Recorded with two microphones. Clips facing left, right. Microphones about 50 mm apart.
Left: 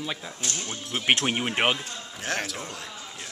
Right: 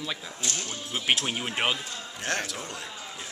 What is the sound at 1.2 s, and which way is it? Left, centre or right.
Speech, left.